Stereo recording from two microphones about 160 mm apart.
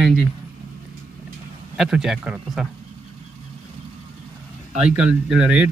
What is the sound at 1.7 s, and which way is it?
Speech, 5° right (ahead or behind).